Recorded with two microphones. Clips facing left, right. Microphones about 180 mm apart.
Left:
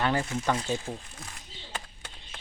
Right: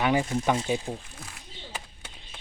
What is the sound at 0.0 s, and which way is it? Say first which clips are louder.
Speech: right 3 dB; 15° right (ahead or behind).